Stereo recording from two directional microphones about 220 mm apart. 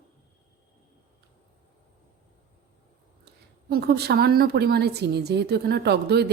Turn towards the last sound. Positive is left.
turn(degrees=-50)  # may be behind; listen again after turning